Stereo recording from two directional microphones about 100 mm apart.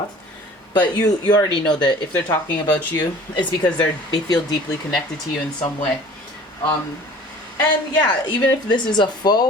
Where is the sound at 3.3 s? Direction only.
45° left (ahead or behind).